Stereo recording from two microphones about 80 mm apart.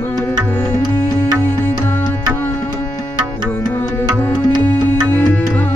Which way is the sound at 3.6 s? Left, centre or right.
Left.